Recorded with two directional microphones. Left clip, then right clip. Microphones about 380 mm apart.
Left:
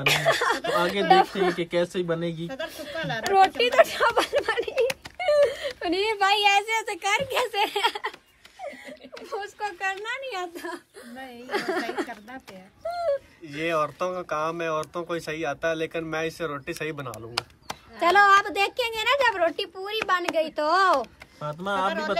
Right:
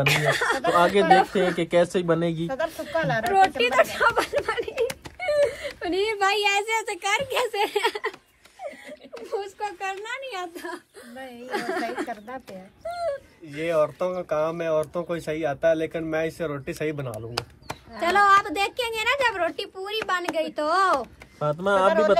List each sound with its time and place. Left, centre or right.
0.0 s a woman's voice: left
0.7 s speech: centre
1.0 s a woman's voice: left
1.6 s speech: centre
2.4 s a woman's voice: centre
3.5 s a woman's voice: left; by 8.1 s centre
9.3 s a woman's voice: centre; by 13.2 s left
13.6 s speech: centre
17.9 s a woman's voice: left
21.4 s speech: centre